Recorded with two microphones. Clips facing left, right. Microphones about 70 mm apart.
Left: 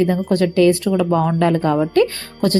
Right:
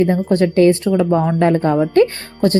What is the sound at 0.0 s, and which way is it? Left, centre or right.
A woman's voice, right.